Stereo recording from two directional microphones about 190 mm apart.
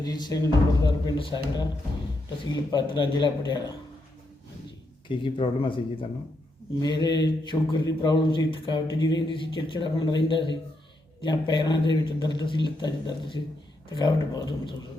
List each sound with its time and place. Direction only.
0.0 s speech: 20° left (ahead or behind)
5.0 s speech: 30° left (ahead or behind)
13.9 s speech: 25° left (ahead or behind)